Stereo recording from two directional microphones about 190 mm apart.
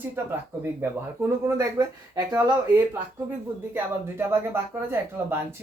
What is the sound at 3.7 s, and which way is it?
Speech, 10° right (ahead or behind).